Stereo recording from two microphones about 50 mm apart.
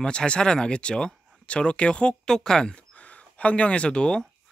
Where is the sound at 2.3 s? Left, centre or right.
Centre.